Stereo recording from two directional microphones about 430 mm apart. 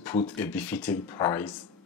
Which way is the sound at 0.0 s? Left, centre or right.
Centre.